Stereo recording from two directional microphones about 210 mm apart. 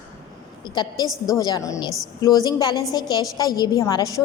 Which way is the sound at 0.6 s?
20° left (ahead or behind).